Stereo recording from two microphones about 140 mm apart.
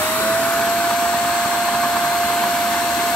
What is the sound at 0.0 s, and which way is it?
Vacuum cleaner, 10° left (ahead or behind).